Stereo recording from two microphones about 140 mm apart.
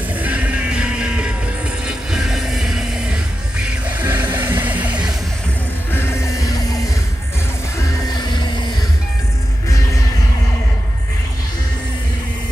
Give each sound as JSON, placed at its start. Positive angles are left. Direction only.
{"t": 0.2, "sound": "music", "side_deg": -10}
{"t": 5.9, "sound": "music", "side_deg": 15}